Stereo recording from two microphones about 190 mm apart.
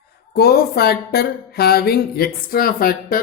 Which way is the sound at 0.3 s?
55° left (ahead or behind).